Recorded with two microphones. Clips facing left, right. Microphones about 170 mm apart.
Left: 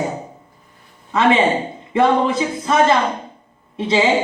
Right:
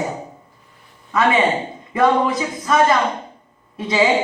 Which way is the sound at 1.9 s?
25° left (ahead or behind).